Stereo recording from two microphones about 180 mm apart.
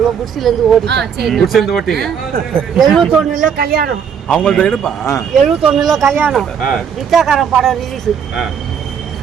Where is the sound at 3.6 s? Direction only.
60° right (ahead or behind).